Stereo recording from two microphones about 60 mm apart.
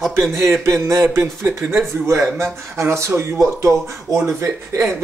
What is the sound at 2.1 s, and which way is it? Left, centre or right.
Speech, right.